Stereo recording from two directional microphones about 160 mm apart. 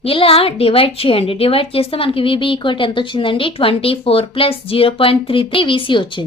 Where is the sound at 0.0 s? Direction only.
35° left (ahead or behind).